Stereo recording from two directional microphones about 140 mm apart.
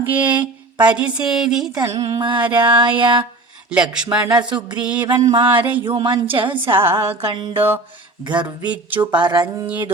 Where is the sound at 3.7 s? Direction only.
5° right (ahead or behind).